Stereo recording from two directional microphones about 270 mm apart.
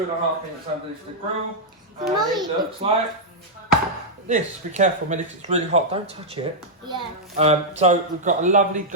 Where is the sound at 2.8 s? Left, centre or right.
Right.